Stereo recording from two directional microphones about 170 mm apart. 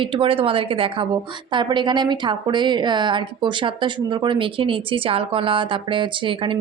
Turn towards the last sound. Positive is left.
turn(degrees=-30)  # may be behind; listen again after turning